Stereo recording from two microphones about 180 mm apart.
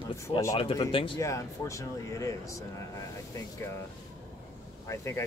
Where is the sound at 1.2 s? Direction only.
15° left (ahead or behind).